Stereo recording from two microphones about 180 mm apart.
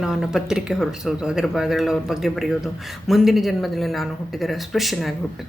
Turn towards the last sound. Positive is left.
turn(degrees=0)  # may be behind; listen again after turning